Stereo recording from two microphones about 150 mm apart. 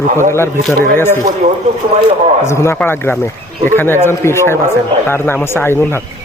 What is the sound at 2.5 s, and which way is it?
Speech, 20° left (ahead or behind).